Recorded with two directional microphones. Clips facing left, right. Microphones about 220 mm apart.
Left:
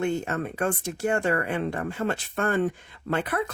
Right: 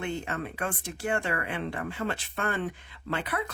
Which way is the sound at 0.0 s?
45° left (ahead or behind).